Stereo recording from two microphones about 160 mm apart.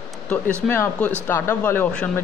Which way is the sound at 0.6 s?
10° left (ahead or behind).